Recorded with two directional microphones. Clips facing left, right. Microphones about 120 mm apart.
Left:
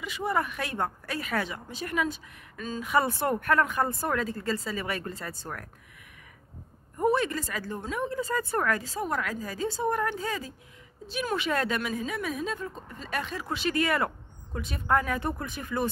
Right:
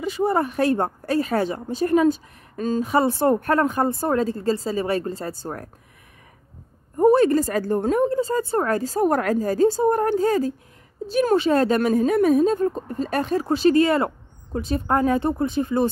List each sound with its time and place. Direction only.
0.0 s speech: 35° right (ahead or behind)
7.0 s speech: 35° right (ahead or behind)